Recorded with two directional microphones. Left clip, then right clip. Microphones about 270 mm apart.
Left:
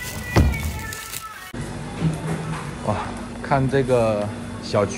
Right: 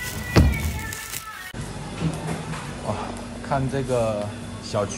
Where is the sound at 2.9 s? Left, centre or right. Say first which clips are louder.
Left 4 dB; centre.